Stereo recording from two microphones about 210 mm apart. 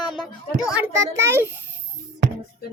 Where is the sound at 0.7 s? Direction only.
10° right (ahead or behind).